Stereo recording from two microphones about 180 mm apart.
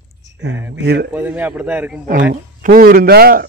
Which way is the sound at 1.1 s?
10° right (ahead or behind).